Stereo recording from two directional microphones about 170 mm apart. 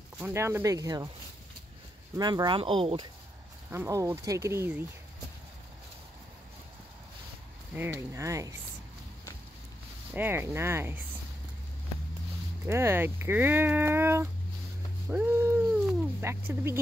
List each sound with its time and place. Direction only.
0.2 s speech: 15° right (ahead or behind)
2.1 s speech: 25° right (ahead or behind)
3.7 s speech: 15° right (ahead or behind)
7.7 s speech: 15° right (ahead or behind)
10.1 s speech: 10° right (ahead or behind)
12.6 s speech: 15° right (ahead or behind)
15.0 s dog: 10° right (ahead or behind)
16.3 s speech: 15° right (ahead or behind)